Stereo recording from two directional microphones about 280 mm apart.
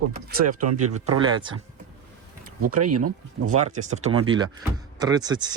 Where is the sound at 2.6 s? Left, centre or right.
Right.